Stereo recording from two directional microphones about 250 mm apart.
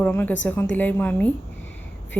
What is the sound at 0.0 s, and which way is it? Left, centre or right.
A woman's voice, centre.